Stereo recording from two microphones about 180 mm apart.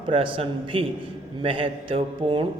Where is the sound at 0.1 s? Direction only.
30° right (ahead or behind).